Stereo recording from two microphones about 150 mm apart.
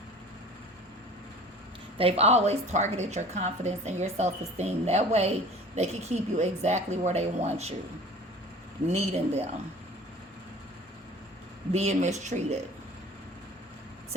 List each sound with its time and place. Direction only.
2.0 s a woman's voice: 40° right (ahead or behind)
8.9 s a woman's voice: 45° right (ahead or behind)
11.7 s a woman's voice: 50° right (ahead or behind)